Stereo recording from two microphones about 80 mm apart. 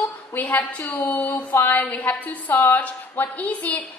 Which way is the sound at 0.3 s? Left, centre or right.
Centre.